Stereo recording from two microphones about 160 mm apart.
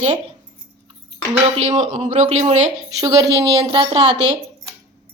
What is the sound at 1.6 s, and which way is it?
A man's voice, 45° right (ahead or behind).